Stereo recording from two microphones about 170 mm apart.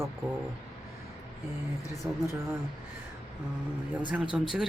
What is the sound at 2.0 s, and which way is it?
Speech, 15° right (ahead or behind).